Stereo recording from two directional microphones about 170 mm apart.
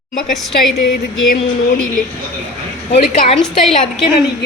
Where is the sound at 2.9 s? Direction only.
45° left (ahead or behind).